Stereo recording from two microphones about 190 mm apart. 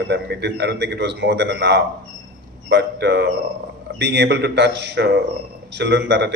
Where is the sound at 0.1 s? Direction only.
60° right (ahead or behind).